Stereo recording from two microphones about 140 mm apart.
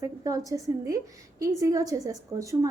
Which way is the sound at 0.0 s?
25° right (ahead or behind).